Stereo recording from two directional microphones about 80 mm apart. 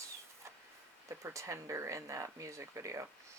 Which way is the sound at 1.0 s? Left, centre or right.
Right.